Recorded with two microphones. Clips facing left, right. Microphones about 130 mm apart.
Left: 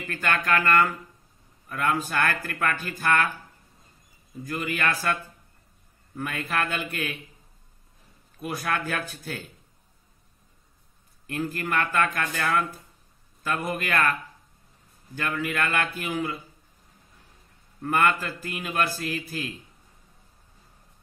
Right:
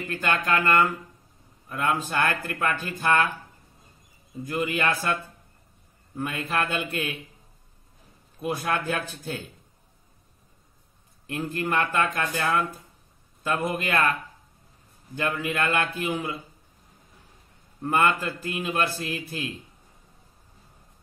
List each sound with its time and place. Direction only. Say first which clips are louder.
0.1 s a man's voice: even; 20° right (ahead or behind)
4.5 s a man's voice: right 2 dB; 25° right (ahead or behind)
6.1 s a man's voice: right 1 dB; 25° right (ahead or behind)
8.4 s a man's voice: right 2 dB; 25° right (ahead or behind)
11.2 s a man's voice: right 1 dB; 25° right (ahead or behind)
15.1 s a man's voice: right 1 dB; 25° right (ahead or behind)
17.8 s a man's voice: right 1 dB; 25° right (ahead or behind)